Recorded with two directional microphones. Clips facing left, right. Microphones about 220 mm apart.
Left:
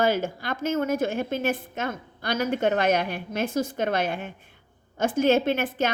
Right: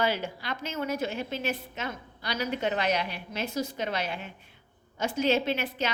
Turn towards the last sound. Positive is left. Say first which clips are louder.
# left 5 dB
turn(degrees=50)  # may be behind; listen again after turning